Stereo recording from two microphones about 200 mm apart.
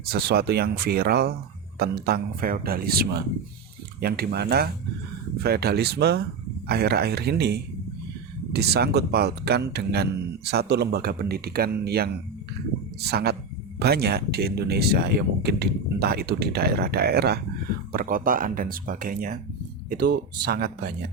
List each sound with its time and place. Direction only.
0.0 s speech: 50° right (ahead or behind)